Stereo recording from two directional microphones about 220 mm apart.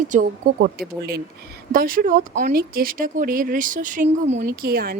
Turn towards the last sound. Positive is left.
turn(degrees=-45)  # may be behind; listen again after turning